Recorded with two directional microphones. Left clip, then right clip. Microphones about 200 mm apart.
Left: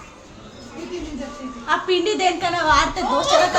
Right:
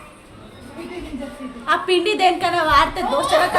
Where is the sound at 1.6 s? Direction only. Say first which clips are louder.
Right 2 dB; 45° right (ahead or behind).